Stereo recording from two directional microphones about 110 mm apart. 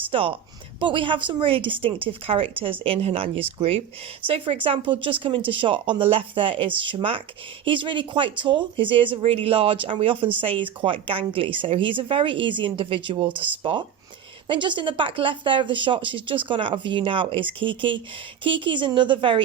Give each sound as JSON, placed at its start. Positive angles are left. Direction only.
{"t": 0.1, "sound": "a woman's voice", "side_deg": -55}